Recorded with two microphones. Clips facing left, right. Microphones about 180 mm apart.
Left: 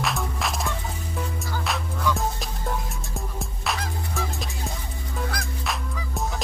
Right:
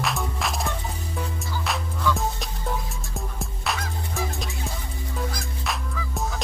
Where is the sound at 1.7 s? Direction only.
Centre (ahead or behind).